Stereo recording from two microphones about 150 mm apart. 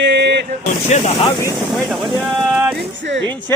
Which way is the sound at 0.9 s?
50° left (ahead or behind).